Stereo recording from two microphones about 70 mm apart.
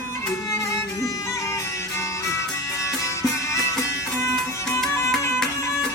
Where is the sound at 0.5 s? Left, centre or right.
Left.